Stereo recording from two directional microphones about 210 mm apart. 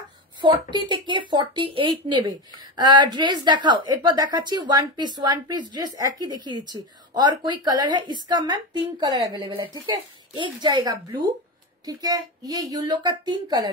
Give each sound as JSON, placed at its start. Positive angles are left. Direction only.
{"t": 0.4, "sound": "a woman's voice", "side_deg": -20}